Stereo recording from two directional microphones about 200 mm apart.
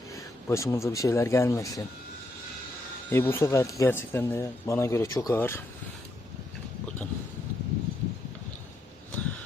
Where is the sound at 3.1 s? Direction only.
10° left (ahead or behind).